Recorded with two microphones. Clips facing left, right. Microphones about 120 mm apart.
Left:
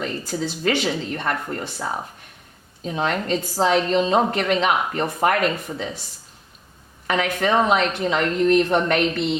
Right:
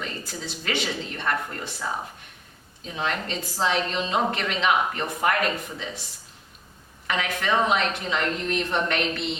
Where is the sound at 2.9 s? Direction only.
45° left (ahead or behind).